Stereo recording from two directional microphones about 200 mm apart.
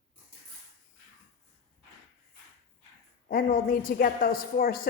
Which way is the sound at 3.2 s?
45° left (ahead or behind).